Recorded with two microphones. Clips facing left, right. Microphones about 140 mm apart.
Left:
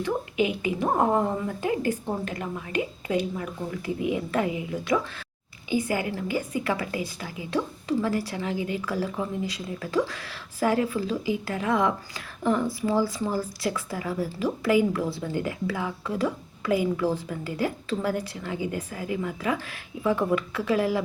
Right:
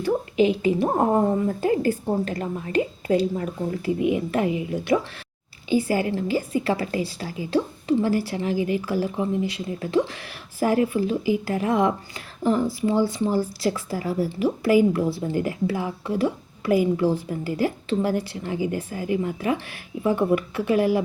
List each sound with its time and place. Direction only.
0.0 s a woman's voice: 35° right (ahead or behind)